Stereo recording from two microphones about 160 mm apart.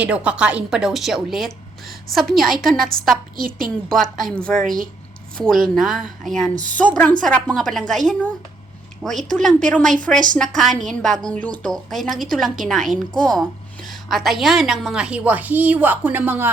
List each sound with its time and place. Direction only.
0.0 s a woman's voice: 5° right (ahead or behind)
3.3 s a woman's voice: 60° right (ahead or behind)
4.3 s a woman's voice: 5° left (ahead or behind); by 16.5 s 10° right (ahead or behind)